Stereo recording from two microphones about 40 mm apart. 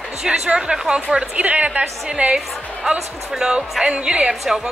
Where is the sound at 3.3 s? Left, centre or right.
Right.